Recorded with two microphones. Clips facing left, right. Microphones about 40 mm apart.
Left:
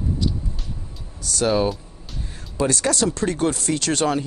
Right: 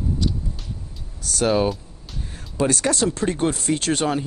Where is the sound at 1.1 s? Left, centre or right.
Right.